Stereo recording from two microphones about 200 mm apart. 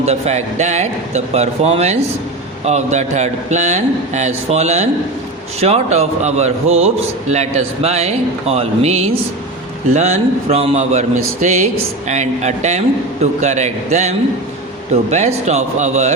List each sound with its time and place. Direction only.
0.0 s a man's voice: 35° right (ahead or behind)